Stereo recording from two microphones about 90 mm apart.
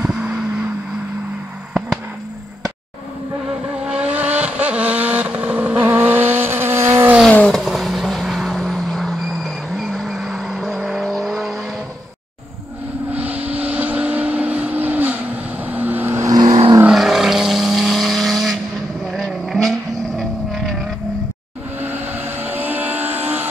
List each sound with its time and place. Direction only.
0.1 s vehicle: 10° right (ahead or behind)
3.8 s vehicle: 10° right (ahead or behind); by 7.2 s 30° right (ahead or behind)
7.2 s vehicle: 10° left (ahead or behind)
7.6 s vehicle: centre (ahead or behind)
13.1 s vehicle: 20° right (ahead or behind)
16.4 s vehicle: 75° right (ahead or behind)
16.9 s vehicle: 5° right (ahead or behind)
21.8 s vehicle: 20° right (ahead or behind)